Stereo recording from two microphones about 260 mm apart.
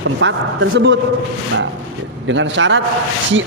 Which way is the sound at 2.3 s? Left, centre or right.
Right.